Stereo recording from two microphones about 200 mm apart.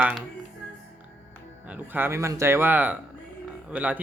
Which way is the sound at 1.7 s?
10° right (ahead or behind).